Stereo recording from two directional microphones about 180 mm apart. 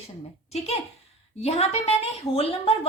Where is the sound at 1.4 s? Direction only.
35° left (ahead or behind).